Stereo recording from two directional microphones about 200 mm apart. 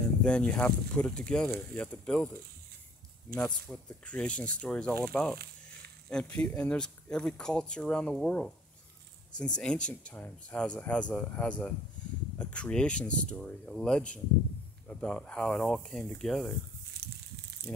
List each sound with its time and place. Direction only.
0.2 s speech: 5° left (ahead or behind)
3.3 s speech: 5° left (ahead or behind)
17.0 s a sound: 50° right (ahead or behind)
17.7 s speech: 10° left (ahead or behind)